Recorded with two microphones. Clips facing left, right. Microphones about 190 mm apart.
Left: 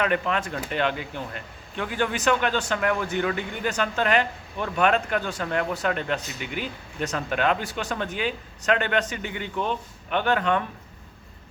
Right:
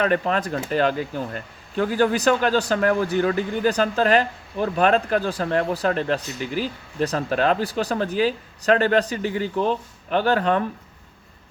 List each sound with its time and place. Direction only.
0.0 s speech: 35° right (ahead or behind)